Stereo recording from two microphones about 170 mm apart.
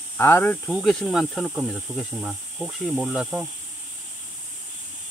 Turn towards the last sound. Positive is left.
turn(degrees=-5)  # may be behind; listen again after turning